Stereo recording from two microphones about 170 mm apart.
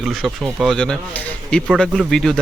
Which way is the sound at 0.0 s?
Centre (ahead or behind).